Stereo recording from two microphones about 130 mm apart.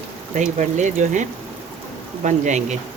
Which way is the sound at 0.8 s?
65° right (ahead or behind).